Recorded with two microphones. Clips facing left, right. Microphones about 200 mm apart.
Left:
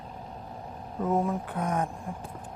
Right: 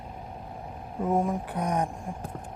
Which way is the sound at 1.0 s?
15° right (ahead or behind).